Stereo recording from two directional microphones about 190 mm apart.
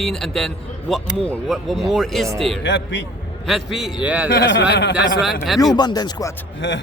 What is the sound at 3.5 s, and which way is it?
Speech, centre (ahead or behind).